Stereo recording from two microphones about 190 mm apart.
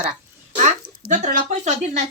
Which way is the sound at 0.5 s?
40° right (ahead or behind).